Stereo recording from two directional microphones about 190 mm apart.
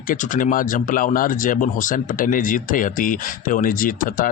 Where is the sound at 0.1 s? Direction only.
45° left (ahead or behind).